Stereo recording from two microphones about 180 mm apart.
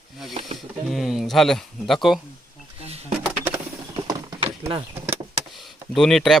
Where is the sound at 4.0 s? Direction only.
20° right (ahead or behind).